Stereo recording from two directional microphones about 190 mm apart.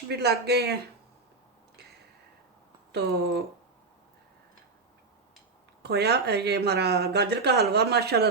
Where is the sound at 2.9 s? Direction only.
60° right (ahead or behind).